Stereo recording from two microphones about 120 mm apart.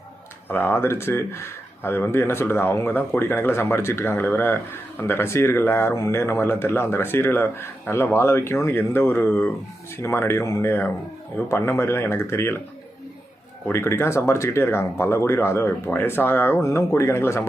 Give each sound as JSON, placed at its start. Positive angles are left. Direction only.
{"t": 0.4, "sound": "speech", "side_deg": 15}
{"t": 13.7, "sound": "speech", "side_deg": 20}